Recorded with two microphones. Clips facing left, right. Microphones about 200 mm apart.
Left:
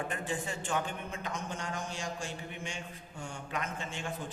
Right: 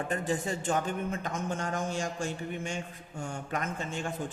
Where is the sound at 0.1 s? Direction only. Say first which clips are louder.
Right 6 dB; 40° right (ahead or behind).